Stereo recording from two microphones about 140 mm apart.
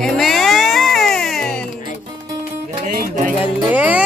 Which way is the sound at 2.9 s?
75° right (ahead or behind).